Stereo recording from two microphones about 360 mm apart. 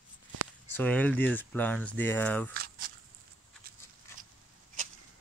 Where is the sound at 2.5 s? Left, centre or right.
Right.